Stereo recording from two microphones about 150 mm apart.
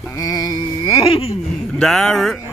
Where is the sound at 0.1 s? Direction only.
25° left (ahead or behind).